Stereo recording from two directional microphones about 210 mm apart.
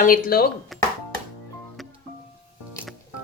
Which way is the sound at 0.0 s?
45° left (ahead or behind).